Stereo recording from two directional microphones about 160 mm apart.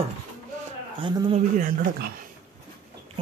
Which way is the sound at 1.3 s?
50° right (ahead or behind).